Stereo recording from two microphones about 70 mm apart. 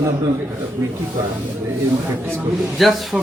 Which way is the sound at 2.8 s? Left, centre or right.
Centre.